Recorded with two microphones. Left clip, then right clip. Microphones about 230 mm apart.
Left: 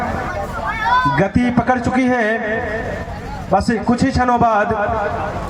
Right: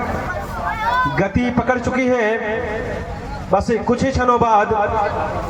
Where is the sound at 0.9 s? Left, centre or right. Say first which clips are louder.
Left 4 dB; left.